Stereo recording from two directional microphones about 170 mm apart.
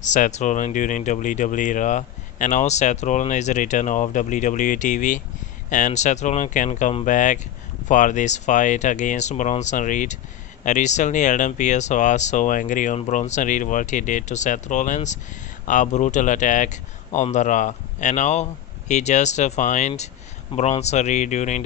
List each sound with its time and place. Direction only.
0.0 s speech: 45° left (ahead or behind)